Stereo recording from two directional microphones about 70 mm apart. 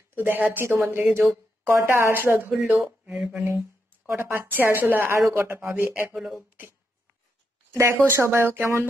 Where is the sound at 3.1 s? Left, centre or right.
Right.